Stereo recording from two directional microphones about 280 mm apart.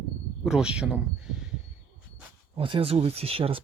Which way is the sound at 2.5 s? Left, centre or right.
Centre.